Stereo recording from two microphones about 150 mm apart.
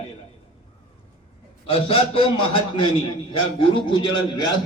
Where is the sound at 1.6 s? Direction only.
35° left (ahead or behind).